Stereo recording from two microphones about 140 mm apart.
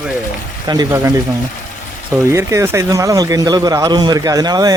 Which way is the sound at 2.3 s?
20° right (ahead or behind).